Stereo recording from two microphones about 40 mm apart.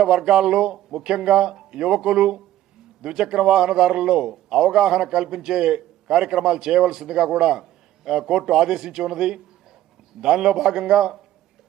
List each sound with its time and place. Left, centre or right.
0.0 s a man's voice: centre